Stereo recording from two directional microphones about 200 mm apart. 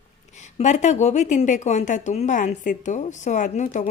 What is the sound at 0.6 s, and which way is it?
A woman's voice, 35° left (ahead or behind).